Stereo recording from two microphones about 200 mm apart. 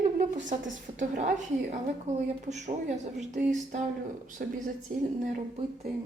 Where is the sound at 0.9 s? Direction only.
35° right (ahead or behind).